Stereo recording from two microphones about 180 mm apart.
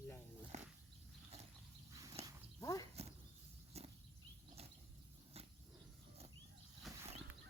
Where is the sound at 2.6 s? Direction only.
20° left (ahead or behind).